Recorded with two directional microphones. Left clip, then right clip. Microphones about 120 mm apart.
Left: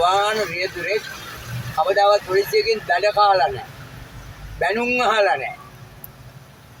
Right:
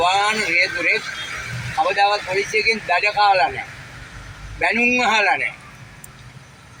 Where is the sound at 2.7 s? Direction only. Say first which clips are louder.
Right 1 dB; 25° left (ahead or behind).